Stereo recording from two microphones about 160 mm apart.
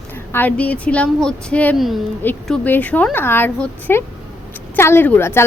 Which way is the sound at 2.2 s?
10° left (ahead or behind).